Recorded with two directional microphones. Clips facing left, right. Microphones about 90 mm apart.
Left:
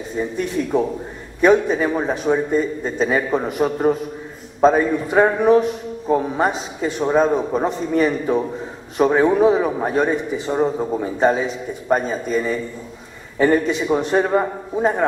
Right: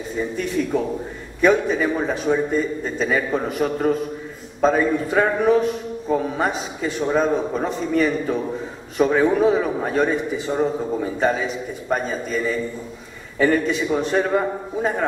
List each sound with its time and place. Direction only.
1.4 s a man's voice: 20° left (ahead or behind)